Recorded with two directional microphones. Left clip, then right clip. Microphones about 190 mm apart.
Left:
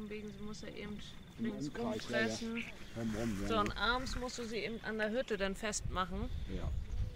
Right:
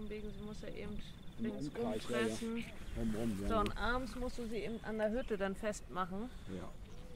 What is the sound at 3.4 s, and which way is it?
Speech, 40° left (ahead or behind).